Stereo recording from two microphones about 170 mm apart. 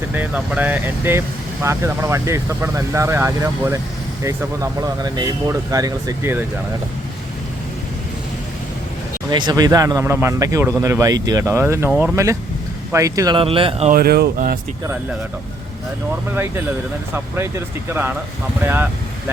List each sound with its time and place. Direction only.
0.1 s speech: 10° right (ahead or behind)
9.3 s speech: 25° right (ahead or behind)
11.9 s speech: 5° right (ahead or behind)
12.1 s speech: 15° right (ahead or behind); by 13.9 s 35° right (ahead or behind)
13.9 s speech: 65° right (ahead or behind)
16.3 s speech: 15° right (ahead or behind)